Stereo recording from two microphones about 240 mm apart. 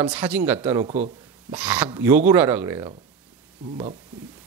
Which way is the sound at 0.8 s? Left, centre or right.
Right.